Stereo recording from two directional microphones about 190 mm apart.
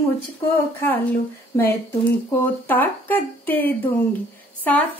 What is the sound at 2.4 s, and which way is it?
Speech, 10° left (ahead or behind).